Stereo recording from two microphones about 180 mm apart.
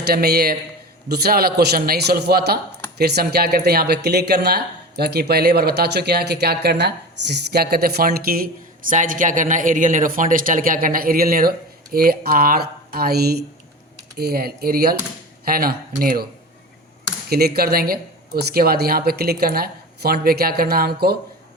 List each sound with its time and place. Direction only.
0.0 s speech: 60° right (ahead or behind)
17.2 s speech: 60° right (ahead or behind)